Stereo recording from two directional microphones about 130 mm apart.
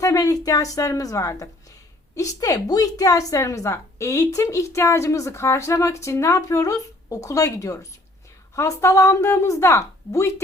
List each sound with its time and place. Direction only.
0.0 s a woman's voice: 25° left (ahead or behind)